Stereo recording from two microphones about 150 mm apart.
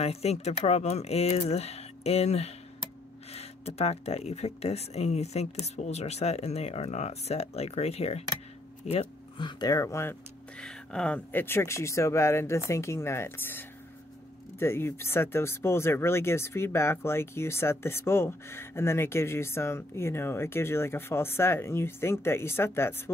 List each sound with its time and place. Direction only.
0.0 s speech: 45° left (ahead or behind); by 10.1 s 20° left (ahead or behind)
10.6 s speech: 5° left (ahead or behind)